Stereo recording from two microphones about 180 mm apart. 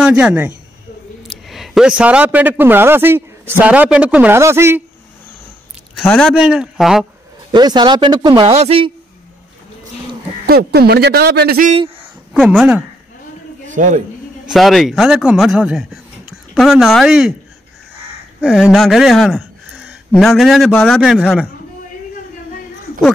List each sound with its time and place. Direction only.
0.0 s a man's voice: 5° right (ahead or behind)
5.9 s a man's voice: 5° left (ahead or behind)
7.5 s speech: 25° right (ahead or behind)
10.4 s speech: 60° right (ahead or behind)
12.4 s a man's voice: 5° right (ahead or behind)
13.7 s speech: 45° right (ahead or behind)
14.4 s speech: centre (ahead or behind)
18.4 s speech: centre (ahead or behind)